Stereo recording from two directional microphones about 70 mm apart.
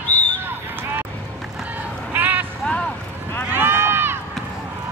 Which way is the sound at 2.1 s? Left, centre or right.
Right.